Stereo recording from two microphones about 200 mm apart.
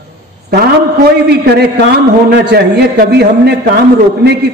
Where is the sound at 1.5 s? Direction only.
55° right (ahead or behind).